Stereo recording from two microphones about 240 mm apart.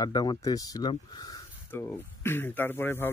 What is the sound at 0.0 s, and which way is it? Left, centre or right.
Speech, centre.